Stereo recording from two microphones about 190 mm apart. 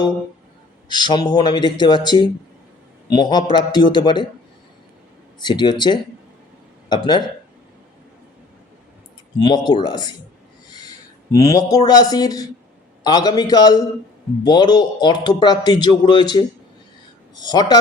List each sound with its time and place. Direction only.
0.9 s a man's voice: 25° left (ahead or behind)
5.4 s a man's voice: 20° left (ahead or behind)
9.4 s a man's voice: 25° left (ahead or behind)
11.3 s a man's voice: 15° left (ahead or behind)
17.5 s a man's voice: 20° left (ahead or behind)